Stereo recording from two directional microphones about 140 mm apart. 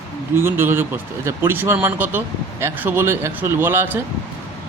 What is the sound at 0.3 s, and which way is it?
Speech, 15° right (ahead or behind).